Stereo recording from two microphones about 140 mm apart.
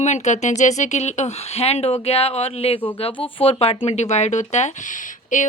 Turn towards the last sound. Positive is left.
turn(degrees=65)  # may be behind; listen again after turning